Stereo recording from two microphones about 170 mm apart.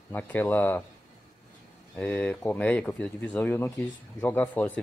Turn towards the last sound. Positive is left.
turn(degrees=10)  # may be behind; listen again after turning